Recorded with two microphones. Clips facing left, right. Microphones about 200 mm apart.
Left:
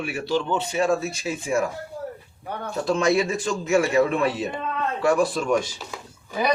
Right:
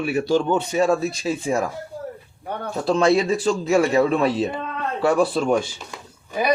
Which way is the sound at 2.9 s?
35° right (ahead or behind).